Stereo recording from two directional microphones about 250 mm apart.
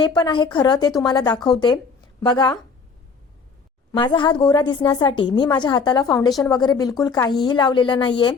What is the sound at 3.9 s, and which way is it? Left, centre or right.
A woman's voice, centre.